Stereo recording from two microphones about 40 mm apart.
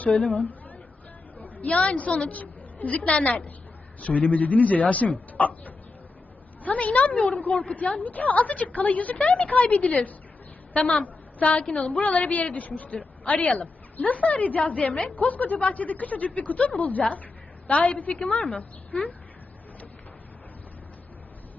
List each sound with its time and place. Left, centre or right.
0.0 s a woman's voice: left
1.6 s a woman's voice: left
2.3 s a woman's voice: left